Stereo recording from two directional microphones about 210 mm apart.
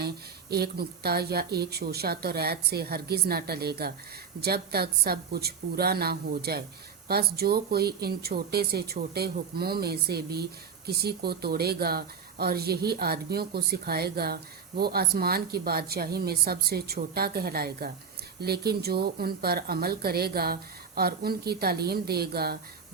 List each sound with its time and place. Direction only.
0.5 s speech: 50° right (ahead or behind)